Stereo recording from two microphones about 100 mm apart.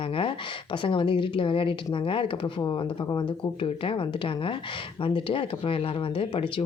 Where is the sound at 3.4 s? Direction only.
60° left (ahead or behind).